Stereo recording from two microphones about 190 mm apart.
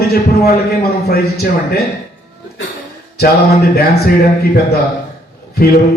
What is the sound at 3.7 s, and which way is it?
Speech, 55° left (ahead or behind).